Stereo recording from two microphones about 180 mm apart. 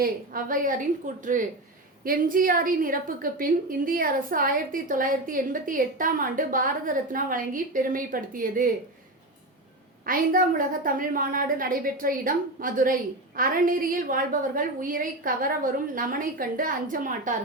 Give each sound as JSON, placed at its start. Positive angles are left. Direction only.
{"t": 0.0, "sound": "a woman's voice", "side_deg": -50}
{"t": 10.1, "sound": "a woman's voice", "side_deg": -50}